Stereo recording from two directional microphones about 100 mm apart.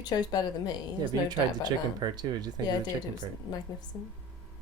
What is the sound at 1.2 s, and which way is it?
Speech, 45° right (ahead or behind).